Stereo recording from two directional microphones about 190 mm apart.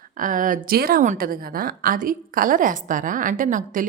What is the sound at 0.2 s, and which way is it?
A woman's voice, 45° right (ahead or behind).